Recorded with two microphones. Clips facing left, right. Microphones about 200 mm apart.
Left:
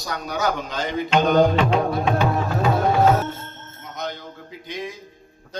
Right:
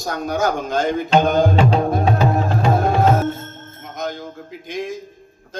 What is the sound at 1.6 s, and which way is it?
Music, 35° right (ahead or behind).